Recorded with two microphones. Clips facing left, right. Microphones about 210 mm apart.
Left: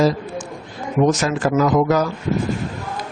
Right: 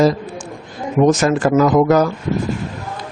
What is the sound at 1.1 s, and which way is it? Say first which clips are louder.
Speech: right 4 dB; 50° right (ahead or behind).